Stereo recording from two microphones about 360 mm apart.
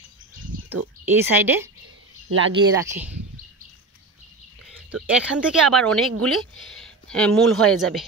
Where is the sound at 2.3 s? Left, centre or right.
Right.